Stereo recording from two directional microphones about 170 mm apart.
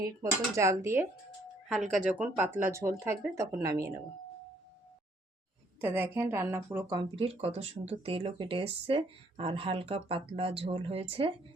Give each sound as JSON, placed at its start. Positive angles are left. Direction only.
{"t": 0.0, "sound": "speech", "side_deg": -20}
{"t": 1.6, "sound": "speech", "side_deg": 0}
{"t": 5.8, "sound": "speech", "side_deg": -15}
{"t": 7.3, "sound": "speech", "side_deg": -35}